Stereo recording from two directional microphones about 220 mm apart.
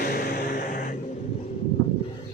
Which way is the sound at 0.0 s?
40° left (ahead or behind).